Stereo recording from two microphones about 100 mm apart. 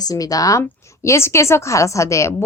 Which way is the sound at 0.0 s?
40° left (ahead or behind).